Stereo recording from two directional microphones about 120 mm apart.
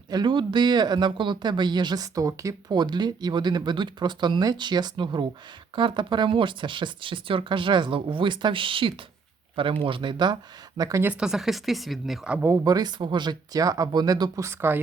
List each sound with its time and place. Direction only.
0.1 s speech: 40° right (ahead or behind)
11.0 s speech: 10° right (ahead or behind)
12.6 s speech: 35° right (ahead or behind)